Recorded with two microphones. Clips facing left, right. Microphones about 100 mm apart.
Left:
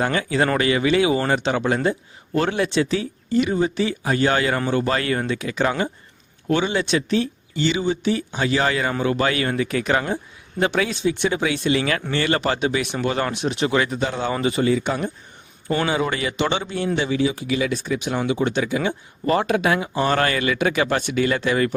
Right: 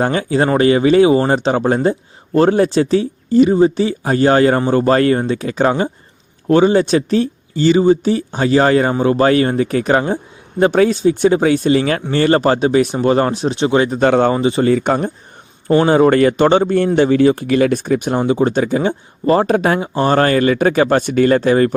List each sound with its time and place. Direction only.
0.0 s a man's voice: 35° right (ahead or behind)
14.0 s speech: 60° right (ahead or behind)
14.3 s speech: 25° right (ahead or behind)
14.6 s a man's voice: 50° right (ahead or behind)